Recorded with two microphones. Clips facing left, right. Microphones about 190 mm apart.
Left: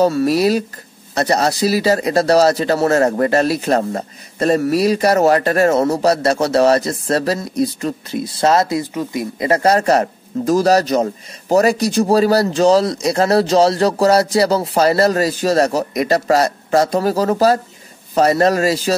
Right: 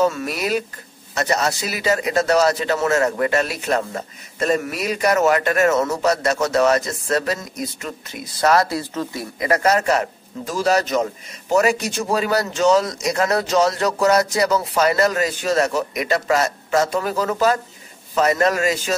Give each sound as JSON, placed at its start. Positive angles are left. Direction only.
{"t": 0.0, "sound": "speech", "side_deg": 35}
{"t": 9.4, "sound": "speech", "side_deg": 30}